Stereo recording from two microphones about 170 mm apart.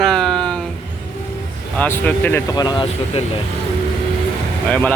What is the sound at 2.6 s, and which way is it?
Speech, 25° left (ahead or behind).